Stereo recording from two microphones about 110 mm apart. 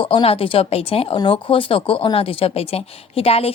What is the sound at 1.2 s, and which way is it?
A woman's voice, 50° left (ahead or behind).